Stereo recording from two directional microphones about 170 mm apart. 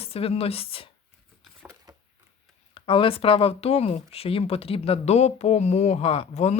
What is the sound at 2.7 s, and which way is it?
Speech, 30° left (ahead or behind).